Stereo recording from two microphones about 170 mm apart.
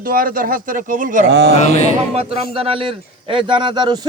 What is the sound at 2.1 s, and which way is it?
A man's voice, 35° right (ahead or behind).